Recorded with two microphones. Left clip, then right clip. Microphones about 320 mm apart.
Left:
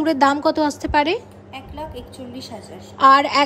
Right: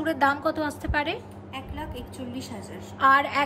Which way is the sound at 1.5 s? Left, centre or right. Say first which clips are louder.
Left 4 dB; centre.